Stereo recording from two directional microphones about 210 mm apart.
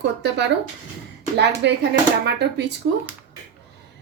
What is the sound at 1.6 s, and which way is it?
Speech, 55° right (ahead or behind).